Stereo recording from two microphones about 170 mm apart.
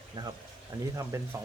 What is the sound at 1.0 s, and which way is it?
Speech, 15° right (ahead or behind).